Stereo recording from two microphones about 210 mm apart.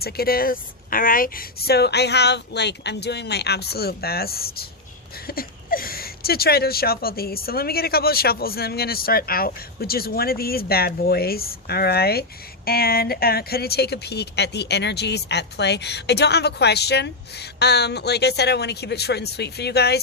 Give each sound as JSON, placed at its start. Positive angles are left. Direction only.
{"t": 0.0, "sound": "speech", "side_deg": 45}